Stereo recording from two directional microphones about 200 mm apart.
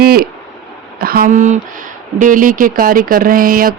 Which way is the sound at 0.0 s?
50° right (ahead or behind).